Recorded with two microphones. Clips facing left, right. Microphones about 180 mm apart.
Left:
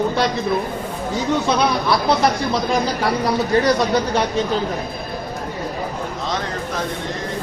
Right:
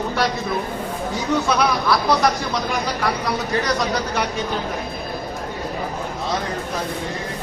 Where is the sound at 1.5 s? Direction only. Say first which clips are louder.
Left 1 dB; 25° left (ahead or behind).